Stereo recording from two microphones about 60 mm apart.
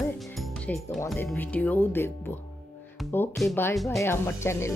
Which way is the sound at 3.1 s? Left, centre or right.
Left.